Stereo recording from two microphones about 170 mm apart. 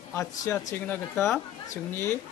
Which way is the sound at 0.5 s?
15° left (ahead or behind).